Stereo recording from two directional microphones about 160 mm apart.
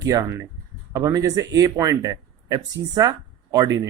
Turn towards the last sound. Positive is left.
turn(degrees=-20)  # may be behind; listen again after turning